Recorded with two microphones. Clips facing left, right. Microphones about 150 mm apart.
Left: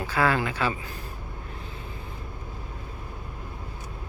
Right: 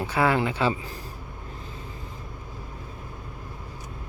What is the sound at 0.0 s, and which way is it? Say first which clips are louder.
Speech: right 2 dB; 20° right (ahead or behind).